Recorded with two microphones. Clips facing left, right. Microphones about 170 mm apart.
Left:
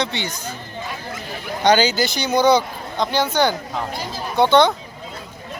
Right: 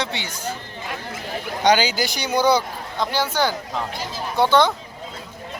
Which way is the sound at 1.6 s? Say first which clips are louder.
Left 2 dB; 10° right (ahead or behind).